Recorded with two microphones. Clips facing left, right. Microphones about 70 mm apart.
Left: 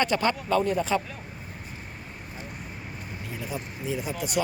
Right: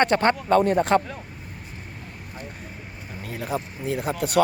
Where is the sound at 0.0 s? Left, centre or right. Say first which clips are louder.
Right 5 dB; right.